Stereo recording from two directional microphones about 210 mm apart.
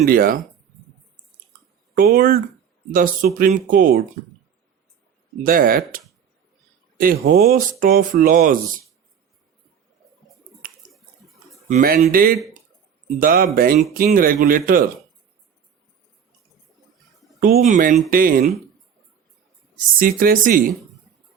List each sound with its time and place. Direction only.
0.0 s speech: 45° right (ahead or behind)
2.0 s speech: 45° right (ahead or behind)
5.4 s speech: 45° right (ahead or behind)
11.7 s speech: 40° right (ahead or behind)
17.4 s speech: 40° right (ahead or behind)
20.0 s speech: 45° right (ahead or behind)